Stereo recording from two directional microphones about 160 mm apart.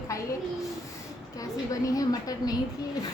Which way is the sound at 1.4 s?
20° left (ahead or behind).